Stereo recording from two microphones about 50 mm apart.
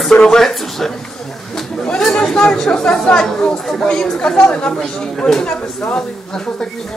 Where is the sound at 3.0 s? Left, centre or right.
Centre.